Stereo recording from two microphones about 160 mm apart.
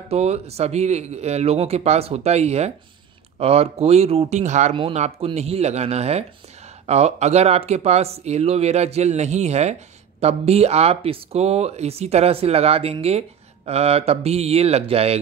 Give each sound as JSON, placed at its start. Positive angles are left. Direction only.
{"t": 0.1, "sound": "speech", "side_deg": -40}